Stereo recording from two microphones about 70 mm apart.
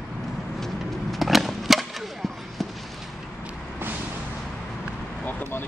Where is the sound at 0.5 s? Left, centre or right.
Centre.